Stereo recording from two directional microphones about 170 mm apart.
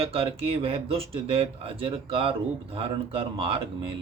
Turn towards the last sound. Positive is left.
turn(degrees=-30)  # may be behind; listen again after turning